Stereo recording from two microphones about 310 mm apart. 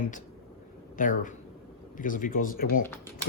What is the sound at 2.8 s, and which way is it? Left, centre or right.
Speech, centre.